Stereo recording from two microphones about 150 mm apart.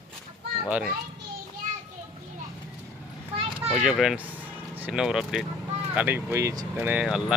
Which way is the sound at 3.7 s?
5° right (ahead or behind).